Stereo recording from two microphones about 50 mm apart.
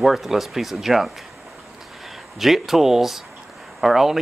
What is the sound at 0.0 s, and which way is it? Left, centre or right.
Speech, centre.